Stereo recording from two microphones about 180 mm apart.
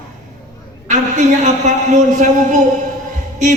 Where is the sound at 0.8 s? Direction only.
40° right (ahead or behind).